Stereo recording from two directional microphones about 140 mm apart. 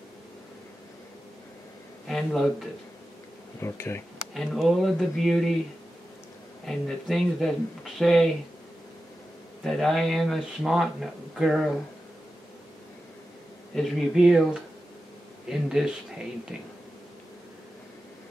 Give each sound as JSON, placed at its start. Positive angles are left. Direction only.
{"t": 2.0, "sound": "speech", "side_deg": 5}
{"t": 3.6, "sound": "speech", "side_deg": 15}
{"t": 4.3, "sound": "speech", "side_deg": 0}
{"t": 6.6, "sound": "speech", "side_deg": 0}
{"t": 9.6, "sound": "speech", "side_deg": 0}
{"t": 13.7, "sound": "speech", "side_deg": 0}